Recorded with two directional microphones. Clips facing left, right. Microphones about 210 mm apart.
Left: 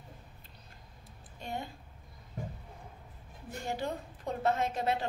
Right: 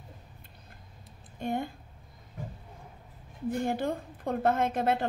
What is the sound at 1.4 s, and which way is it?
Speech, 55° right (ahead or behind).